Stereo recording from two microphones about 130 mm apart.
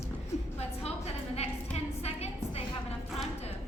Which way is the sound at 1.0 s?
55° left (ahead or behind).